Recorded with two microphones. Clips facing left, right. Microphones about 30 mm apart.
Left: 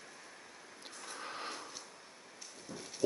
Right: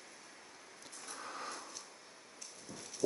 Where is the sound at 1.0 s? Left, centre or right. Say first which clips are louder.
Left 2 dB; centre.